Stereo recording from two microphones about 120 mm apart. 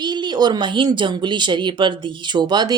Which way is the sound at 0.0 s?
40° right (ahead or behind).